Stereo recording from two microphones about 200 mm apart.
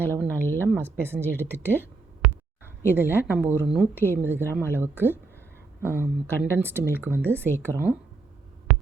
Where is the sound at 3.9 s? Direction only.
10° left (ahead or behind).